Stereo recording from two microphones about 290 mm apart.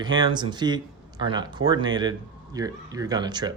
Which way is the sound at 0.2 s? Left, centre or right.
Centre.